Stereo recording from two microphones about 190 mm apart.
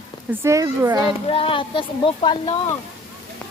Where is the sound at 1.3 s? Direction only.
30° left (ahead or behind).